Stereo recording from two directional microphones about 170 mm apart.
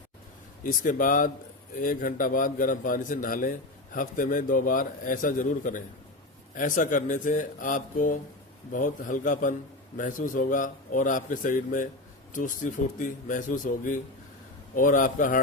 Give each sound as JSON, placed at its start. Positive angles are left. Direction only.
{"t": 0.6, "sound": "a man's voice", "side_deg": 55}